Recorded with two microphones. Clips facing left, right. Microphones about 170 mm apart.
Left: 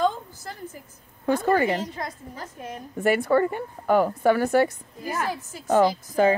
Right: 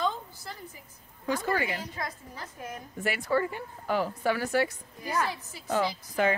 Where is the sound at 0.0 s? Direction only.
45° left (ahead or behind).